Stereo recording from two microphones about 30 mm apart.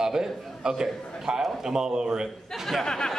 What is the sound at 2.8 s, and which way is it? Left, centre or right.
Chatter, left.